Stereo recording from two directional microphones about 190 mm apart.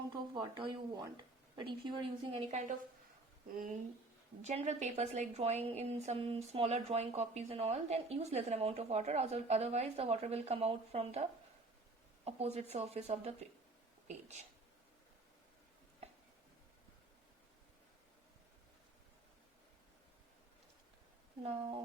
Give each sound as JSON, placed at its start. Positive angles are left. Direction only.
{"t": 0.1, "sound": "speech", "side_deg": -25}
{"t": 2.5, "sound": "a woman's voice", "side_deg": -40}
{"t": 4.4, "sound": "a woman's voice", "side_deg": -35}